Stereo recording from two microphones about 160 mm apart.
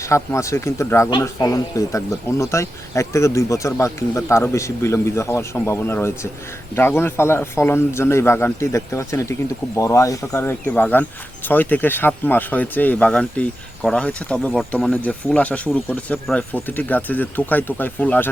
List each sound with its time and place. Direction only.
0.1 s speech: 20° left (ahead or behind)